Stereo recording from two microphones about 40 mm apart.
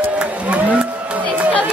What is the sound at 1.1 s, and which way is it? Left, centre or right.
Music, right.